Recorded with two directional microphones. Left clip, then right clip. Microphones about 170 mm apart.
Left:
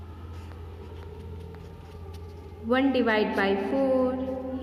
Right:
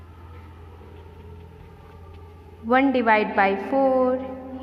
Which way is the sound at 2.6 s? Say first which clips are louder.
Right 5 dB; 30° right (ahead or behind).